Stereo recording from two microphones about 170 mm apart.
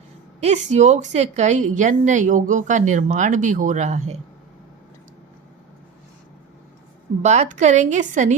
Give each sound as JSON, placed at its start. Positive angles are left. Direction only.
{"t": 0.3, "sound": "a woman's voice", "side_deg": -40}
{"t": 7.2, "sound": "a woman's voice", "side_deg": -45}